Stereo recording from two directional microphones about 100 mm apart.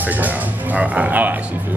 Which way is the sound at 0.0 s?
15° right (ahead or behind).